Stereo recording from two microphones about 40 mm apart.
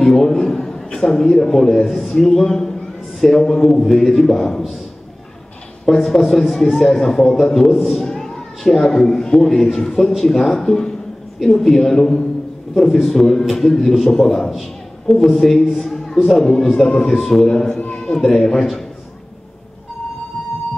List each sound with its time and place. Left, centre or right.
0.0 s a man's voice: centre
5.9 s a man's voice: centre
17.7 s a sound: left
18.2 s a man's voice: centre